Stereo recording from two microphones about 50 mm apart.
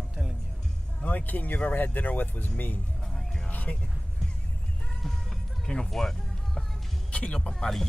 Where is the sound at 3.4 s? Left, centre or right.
Left.